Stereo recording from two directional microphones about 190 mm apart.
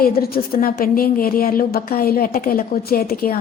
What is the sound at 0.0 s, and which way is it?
A woman's voice, 50° left (ahead or behind).